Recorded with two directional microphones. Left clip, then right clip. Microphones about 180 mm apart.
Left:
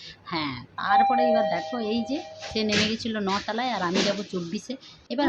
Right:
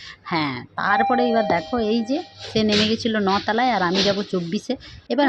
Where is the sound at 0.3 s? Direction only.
35° right (ahead or behind).